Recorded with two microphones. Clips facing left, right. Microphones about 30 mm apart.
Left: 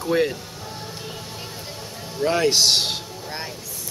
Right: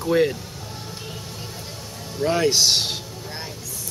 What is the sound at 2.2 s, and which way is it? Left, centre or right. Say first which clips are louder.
Speech: even; centre.